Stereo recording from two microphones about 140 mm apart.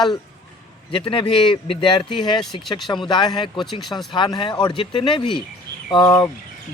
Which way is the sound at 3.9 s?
35° left (ahead or behind).